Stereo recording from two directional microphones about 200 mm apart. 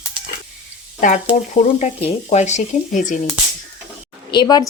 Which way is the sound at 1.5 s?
35° left (ahead or behind).